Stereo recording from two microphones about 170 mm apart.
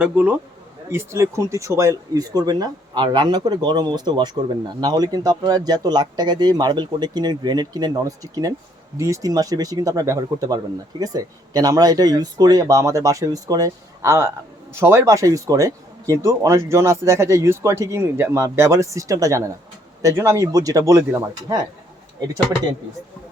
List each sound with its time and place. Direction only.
0.0 s speech: 10° right (ahead or behind)